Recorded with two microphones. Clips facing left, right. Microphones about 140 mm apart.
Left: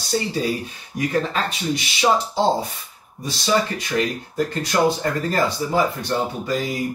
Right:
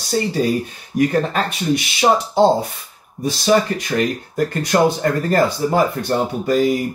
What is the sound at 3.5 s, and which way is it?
A man's voice, 50° right (ahead or behind).